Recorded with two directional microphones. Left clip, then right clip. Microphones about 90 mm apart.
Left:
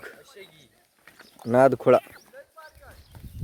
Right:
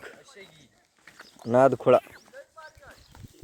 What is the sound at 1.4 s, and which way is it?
Speech, 55° left (ahead or behind).